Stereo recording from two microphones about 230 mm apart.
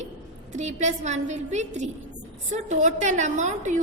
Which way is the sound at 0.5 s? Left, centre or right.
Right.